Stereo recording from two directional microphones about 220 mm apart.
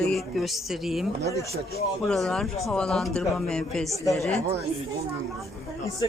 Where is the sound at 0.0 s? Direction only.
Centre (ahead or behind).